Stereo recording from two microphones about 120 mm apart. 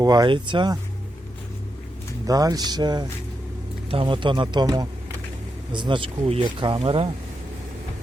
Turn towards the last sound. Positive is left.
turn(degrees=-55)  # may be behind; listen again after turning